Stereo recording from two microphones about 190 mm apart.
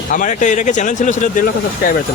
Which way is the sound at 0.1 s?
40° left (ahead or behind).